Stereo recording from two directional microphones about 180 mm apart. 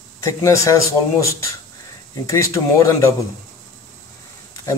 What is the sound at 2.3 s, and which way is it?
Speech, 20° left (ahead or behind).